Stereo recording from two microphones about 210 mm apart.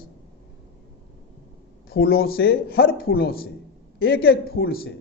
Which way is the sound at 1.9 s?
45° left (ahead or behind).